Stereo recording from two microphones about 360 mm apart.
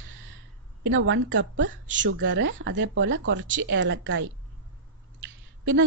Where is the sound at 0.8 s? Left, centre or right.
Right.